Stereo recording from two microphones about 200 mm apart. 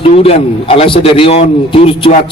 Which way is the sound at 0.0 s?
30° left (ahead or behind).